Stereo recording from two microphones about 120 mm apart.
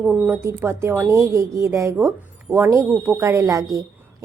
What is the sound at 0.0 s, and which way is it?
A woman's voice, 10° right (ahead or behind).